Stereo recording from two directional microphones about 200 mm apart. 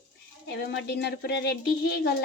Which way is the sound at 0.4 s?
60° left (ahead or behind).